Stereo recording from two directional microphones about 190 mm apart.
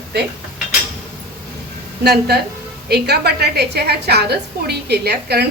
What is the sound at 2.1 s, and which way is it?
A woman's voice, 55° right (ahead or behind).